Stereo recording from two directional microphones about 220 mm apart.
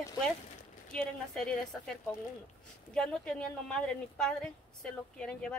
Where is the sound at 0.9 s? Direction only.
5° left (ahead or behind).